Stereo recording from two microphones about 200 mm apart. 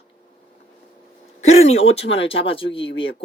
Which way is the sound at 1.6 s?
30° left (ahead or behind).